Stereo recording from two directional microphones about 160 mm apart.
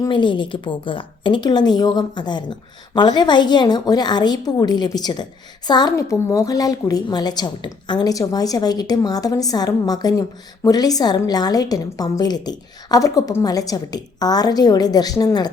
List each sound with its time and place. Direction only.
0.0 s a woman's voice: 30° left (ahead or behind)